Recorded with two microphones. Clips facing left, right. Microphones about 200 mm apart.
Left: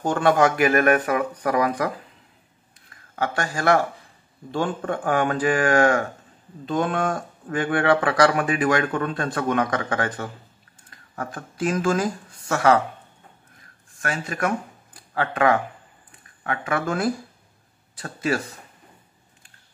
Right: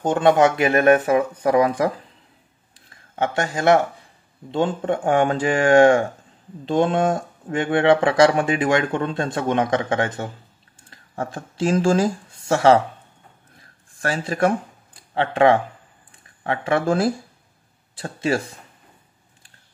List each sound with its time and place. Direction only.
0.0 s speech: 20° right (ahead or behind)
2.9 s speech: 25° right (ahead or behind)
13.9 s speech: 30° right (ahead or behind)